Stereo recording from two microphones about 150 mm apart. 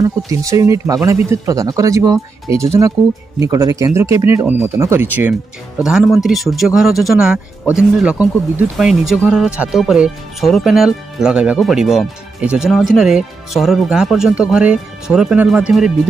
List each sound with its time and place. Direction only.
0.0 s speech: 20° right (ahead or behind); by 15.9 s 5° right (ahead or behind)